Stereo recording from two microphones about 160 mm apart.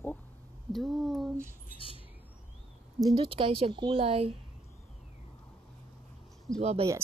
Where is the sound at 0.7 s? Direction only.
Centre (ahead or behind).